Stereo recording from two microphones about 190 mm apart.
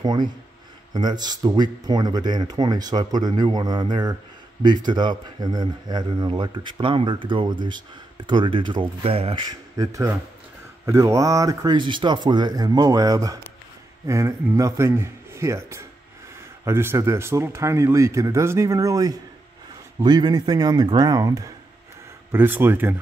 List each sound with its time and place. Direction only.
0.0 s a man's voice: 20° right (ahead or behind)